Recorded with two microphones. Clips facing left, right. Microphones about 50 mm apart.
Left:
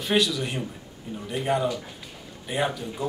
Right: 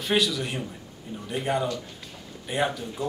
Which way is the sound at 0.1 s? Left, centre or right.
Centre.